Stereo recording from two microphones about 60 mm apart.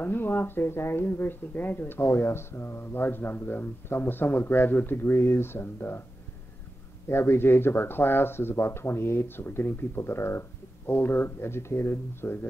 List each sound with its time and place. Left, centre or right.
0.0 s speech: left
7.1 s speech: left